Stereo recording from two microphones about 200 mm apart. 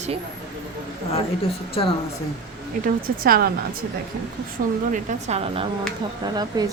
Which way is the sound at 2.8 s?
50° right (ahead or behind).